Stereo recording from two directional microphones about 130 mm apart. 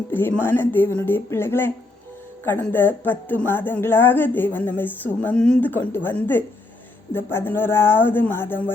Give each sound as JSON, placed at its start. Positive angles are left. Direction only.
{"t": 0.1, "sound": "a woman's voice", "side_deg": 15}